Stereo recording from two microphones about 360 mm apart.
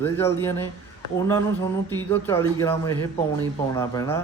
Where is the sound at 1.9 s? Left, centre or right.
Centre.